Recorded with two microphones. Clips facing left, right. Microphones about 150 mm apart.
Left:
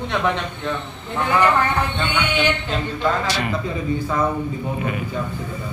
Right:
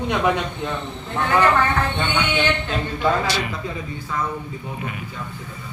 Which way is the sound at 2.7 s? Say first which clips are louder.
Even; 10° right (ahead or behind).